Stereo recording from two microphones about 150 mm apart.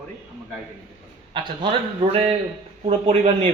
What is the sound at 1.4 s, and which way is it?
A man's voice, 35° right (ahead or behind).